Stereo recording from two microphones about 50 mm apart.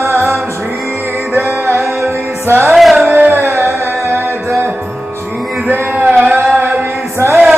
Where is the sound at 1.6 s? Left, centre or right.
Right.